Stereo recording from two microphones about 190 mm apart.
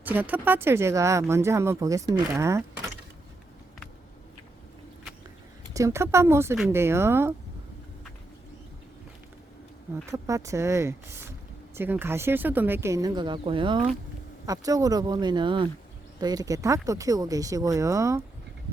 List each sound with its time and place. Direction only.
0.0 s speech: 10° right (ahead or behind)
5.7 s speech: 15° right (ahead or behind)
10.1 s speech: 15° right (ahead or behind)